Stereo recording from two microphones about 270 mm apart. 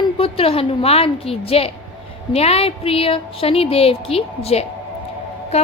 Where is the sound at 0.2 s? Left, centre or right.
Left.